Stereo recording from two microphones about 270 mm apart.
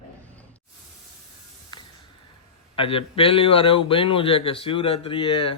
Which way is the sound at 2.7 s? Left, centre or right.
Centre.